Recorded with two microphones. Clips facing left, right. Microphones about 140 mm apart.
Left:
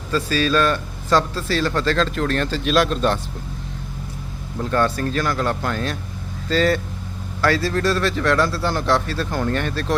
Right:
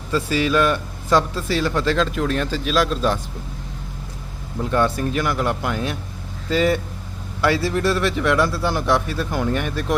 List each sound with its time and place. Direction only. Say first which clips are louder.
0.1 s a man's voice: even; 20° right (ahead or behind); by 3.2 s 5° right (ahead or behind)
4.7 s a man's voice: even; 15° right (ahead or behind)